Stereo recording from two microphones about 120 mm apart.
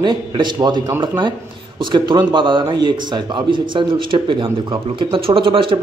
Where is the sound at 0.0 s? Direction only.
40° right (ahead or behind).